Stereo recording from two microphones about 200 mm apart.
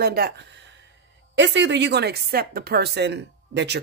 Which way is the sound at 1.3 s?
65° right (ahead or behind).